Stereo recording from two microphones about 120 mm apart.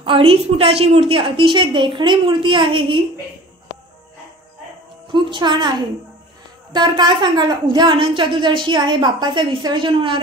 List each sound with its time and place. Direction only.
0.0 s a woman's voice: 50° right (ahead or behind)
5.1 s a woman's voice: 40° right (ahead or behind)